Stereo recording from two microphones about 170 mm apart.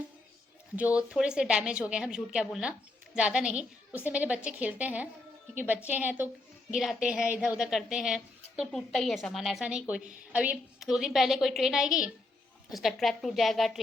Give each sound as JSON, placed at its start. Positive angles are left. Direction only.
{"t": 0.9, "sound": "a woman's voice", "side_deg": -5}
{"t": 10.0, "sound": "a woman's voice", "side_deg": -45}
{"t": 10.3, "sound": "a woman's voice", "side_deg": -5}